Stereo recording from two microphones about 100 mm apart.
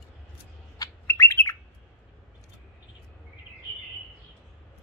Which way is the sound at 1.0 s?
25° left (ahead or behind).